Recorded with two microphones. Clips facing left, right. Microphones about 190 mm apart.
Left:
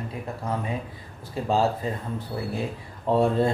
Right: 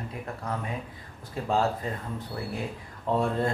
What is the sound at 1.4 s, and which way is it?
Speech, 25° left (ahead or behind).